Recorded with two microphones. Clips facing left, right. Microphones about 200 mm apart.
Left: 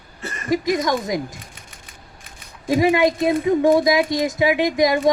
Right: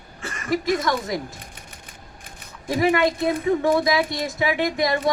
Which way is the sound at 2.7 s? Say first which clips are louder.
Left 3 dB; 20° left (ahead or behind).